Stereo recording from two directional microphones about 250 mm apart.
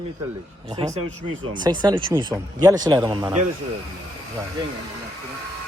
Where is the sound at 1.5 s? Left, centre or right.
Centre.